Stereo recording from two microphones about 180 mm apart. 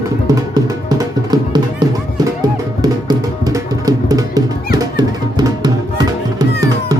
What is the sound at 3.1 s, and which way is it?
Music, 20° right (ahead or behind).